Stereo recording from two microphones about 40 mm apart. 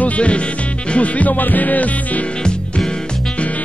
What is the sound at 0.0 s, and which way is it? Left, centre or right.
Music, left.